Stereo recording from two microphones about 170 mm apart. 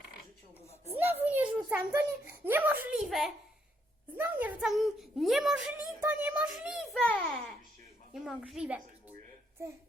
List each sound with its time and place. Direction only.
0.9 s a sound: 10° right (ahead or behind)
2.4 s a child's voice: 10° right (ahead or behind); by 7.3 s 10° left (ahead or behind)
8.1 s a child's voice: 5° right (ahead or behind)